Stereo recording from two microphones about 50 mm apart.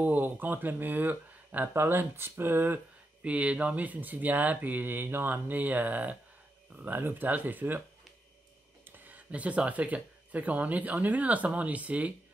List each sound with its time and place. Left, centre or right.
0.0 s speech: right
1.7 s speech: right
3.2 s speech: right
8.8 s speech: right